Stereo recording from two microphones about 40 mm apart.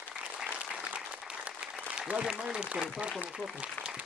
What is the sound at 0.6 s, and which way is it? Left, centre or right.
Applause, right.